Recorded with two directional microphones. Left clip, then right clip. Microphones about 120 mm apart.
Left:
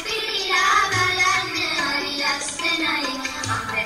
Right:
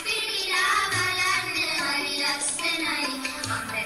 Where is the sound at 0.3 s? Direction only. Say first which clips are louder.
Left 6 dB; 40° left (ahead or behind).